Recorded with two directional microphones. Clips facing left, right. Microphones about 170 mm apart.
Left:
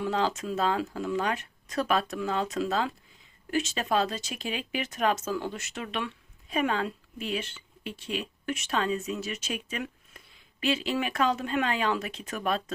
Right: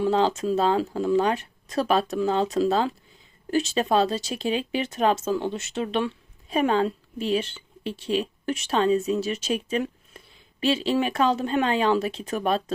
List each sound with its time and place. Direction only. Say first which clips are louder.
0.0 s speech: right 6 dB; 30° right (ahead or behind)